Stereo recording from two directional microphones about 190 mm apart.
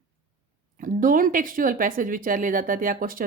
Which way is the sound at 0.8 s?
45° right (ahead or behind).